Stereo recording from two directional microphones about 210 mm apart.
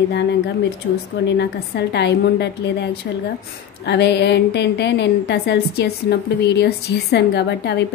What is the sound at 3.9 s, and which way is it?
A woman's voice, 55° left (ahead or behind).